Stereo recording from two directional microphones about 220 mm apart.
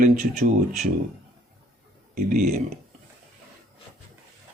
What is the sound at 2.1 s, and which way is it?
Speech, 35° right (ahead or behind).